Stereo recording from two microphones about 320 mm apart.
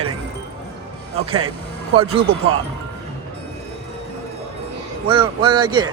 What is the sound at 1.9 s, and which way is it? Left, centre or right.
Speech, centre.